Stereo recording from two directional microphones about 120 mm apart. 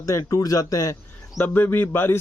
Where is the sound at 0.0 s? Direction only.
25° left (ahead or behind).